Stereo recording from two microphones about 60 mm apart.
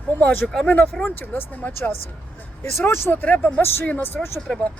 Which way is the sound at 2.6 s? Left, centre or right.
Left.